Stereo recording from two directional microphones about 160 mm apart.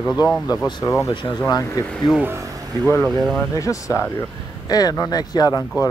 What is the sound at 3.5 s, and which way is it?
Speech, 20° left (ahead or behind).